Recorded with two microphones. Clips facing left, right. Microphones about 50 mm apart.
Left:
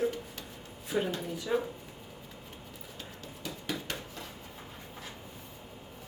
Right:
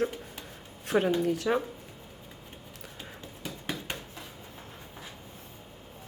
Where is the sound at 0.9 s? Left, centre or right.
Right.